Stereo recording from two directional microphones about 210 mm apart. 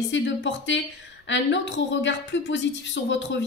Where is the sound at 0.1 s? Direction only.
60° left (ahead or behind).